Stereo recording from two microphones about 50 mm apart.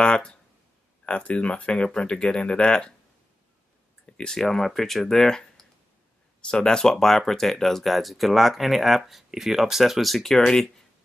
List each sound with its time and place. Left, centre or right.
0.0 s speech: centre
4.0 s speech: centre